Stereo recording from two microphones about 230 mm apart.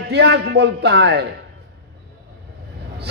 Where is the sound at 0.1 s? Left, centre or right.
Right.